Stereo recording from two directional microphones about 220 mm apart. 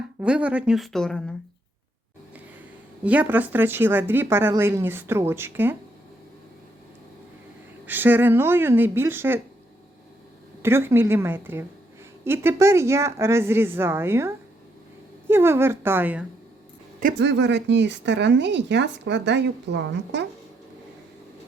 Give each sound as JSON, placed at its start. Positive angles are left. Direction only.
{"t": 0.2, "sound": "speech", "side_deg": -5}
{"t": 3.0, "sound": "a woman's voice", "side_deg": -5}
{"t": 7.9, "sound": "a woman's voice", "side_deg": -10}
{"t": 10.6, "sound": "a woman's voice", "side_deg": -10}
{"t": 17.0, "sound": "speech", "side_deg": -45}